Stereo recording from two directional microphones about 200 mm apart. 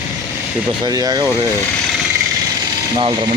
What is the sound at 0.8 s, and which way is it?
Speech, 20° right (ahead or behind).